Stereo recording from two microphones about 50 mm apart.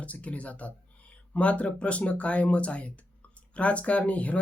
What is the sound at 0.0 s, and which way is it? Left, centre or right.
Speech, left.